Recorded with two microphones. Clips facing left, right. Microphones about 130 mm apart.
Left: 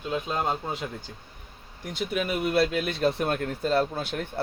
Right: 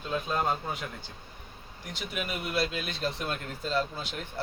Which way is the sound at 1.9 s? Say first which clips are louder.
Left 7 dB; 55° left (ahead or behind).